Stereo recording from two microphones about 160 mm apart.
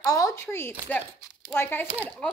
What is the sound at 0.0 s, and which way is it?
A woman's voice, 20° left (ahead or behind).